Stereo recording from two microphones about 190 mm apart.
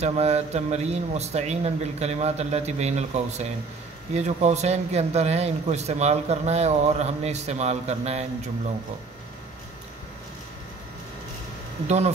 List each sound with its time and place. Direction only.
0.0 s speech: 35° right (ahead or behind)